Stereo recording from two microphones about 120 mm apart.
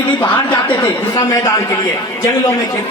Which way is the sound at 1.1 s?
30° left (ahead or behind).